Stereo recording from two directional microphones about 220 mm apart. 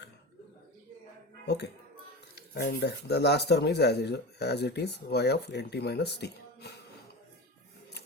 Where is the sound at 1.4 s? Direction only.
50° left (ahead or behind).